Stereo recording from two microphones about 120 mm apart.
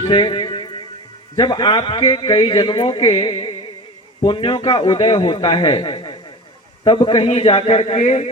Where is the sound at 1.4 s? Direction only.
35° left (ahead or behind).